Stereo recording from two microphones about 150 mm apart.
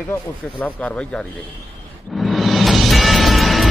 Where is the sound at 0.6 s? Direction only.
10° left (ahead or behind).